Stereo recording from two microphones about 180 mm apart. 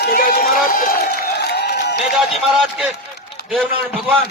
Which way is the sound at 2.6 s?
5° right (ahead or behind).